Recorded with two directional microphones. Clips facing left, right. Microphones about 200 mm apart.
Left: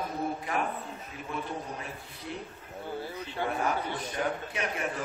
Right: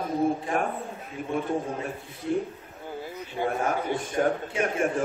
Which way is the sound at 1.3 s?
50° right (ahead or behind).